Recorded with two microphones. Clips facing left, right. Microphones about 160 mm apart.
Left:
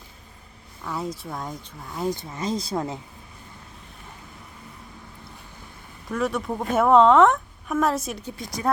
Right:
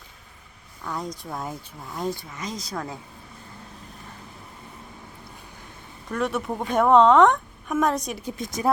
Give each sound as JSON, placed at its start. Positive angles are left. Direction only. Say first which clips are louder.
{"t": 0.9, "sound": "a woman's voice", "louder": "left 1 dB", "side_deg": 5}
{"t": 2.3, "sound": "speech", "louder": "left 6 dB", "side_deg": 30}
{"t": 6.1, "sound": "a woman's voice", "louder": "left 1 dB", "side_deg": 0}
{"t": 8.6, "sound": "speech", "louder": "right 2 dB", "side_deg": -20}